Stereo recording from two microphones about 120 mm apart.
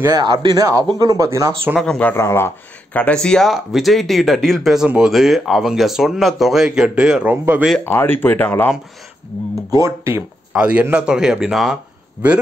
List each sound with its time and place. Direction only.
0.0 s speech: 35° right (ahead or behind)
1.8 s speech: 5° left (ahead or behind)
2.0 s speech: 20° left (ahead or behind); by 7.3 s 5° right (ahead or behind)
7.8 s speech: 15° left (ahead or behind)
9.8 s speech: 25° right (ahead or behind)
10.5 s a man's voice: 10° right (ahead or behind)